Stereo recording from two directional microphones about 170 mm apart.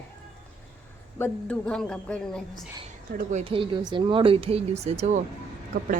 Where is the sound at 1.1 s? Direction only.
10° left (ahead or behind).